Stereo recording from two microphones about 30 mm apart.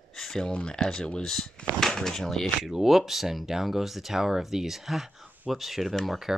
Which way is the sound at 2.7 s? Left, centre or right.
Centre.